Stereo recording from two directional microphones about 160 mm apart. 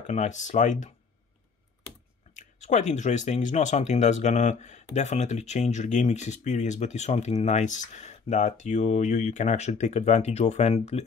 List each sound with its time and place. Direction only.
0.0 s speech: 45° left (ahead or behind)
2.3 s speech: 50° left (ahead or behind)